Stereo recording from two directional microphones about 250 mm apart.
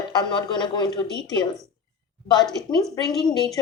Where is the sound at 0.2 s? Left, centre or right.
Centre.